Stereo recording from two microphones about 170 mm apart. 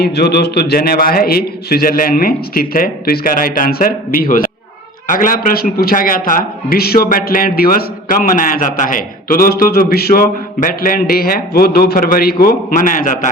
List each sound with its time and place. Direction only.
0.0 s a man's voice: 70° left (ahead or behind); by 13.1 s 50° left (ahead or behind)